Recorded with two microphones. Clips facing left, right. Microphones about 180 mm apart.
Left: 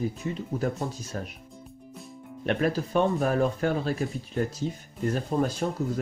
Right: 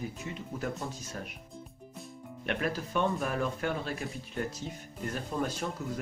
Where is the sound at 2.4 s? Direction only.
35° left (ahead or behind).